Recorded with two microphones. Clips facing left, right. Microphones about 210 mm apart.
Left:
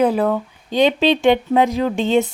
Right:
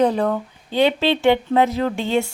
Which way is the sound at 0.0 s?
5° left (ahead or behind).